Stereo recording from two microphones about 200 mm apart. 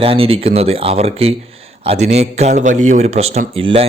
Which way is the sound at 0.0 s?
30° right (ahead or behind).